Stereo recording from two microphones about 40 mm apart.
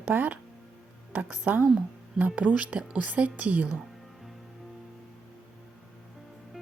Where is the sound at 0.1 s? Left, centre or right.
Right.